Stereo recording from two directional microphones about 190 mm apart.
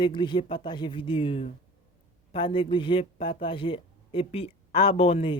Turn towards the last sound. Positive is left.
turn(degrees=30)  # may be behind; listen again after turning